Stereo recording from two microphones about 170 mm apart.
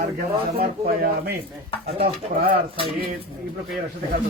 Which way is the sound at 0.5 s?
65° right (ahead or behind).